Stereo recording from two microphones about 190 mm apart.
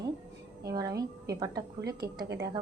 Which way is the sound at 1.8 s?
60° right (ahead or behind).